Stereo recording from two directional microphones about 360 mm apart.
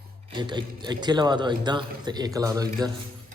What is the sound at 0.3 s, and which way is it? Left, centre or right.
A man's voice, centre.